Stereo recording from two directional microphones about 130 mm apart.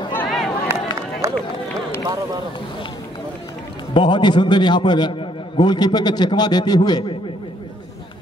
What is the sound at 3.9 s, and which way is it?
A man's voice, 35° left (ahead or behind).